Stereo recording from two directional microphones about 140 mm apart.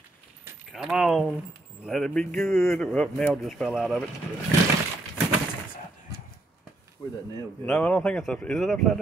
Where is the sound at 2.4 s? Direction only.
20° left (ahead or behind).